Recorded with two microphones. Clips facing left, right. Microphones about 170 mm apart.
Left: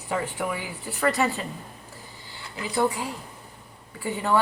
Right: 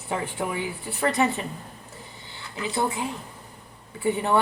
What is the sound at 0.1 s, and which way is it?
A woman's voice, 25° right (ahead or behind).